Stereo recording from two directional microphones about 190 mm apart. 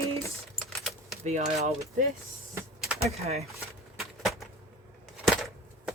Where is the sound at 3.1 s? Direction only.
35° right (ahead or behind).